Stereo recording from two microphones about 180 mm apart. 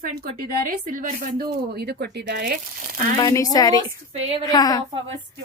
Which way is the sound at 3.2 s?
20° left (ahead or behind).